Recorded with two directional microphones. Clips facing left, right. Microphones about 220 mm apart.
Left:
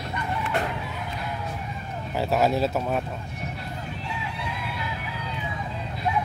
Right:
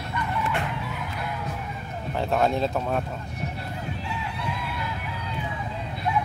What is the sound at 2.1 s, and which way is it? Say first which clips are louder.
Speech: left 1 dB; 5° left (ahead or behind).